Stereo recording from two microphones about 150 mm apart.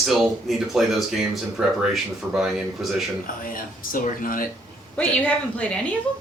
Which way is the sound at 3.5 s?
65° left (ahead or behind).